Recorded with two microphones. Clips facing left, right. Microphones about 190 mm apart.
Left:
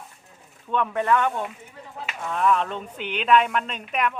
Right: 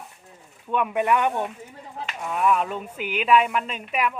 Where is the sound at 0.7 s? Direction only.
10° right (ahead or behind).